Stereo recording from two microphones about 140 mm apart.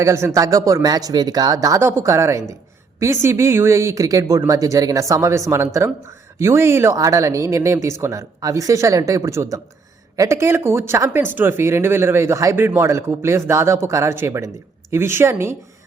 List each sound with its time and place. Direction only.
0.0 s speech: 20° right (ahead or behind)